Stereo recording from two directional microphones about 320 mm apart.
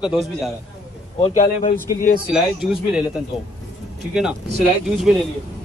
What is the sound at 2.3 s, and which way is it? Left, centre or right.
Speech, centre.